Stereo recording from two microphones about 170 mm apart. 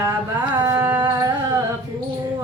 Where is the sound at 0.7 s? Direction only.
15° right (ahead or behind).